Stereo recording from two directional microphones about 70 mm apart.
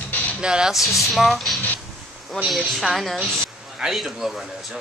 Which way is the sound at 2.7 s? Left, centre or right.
Centre.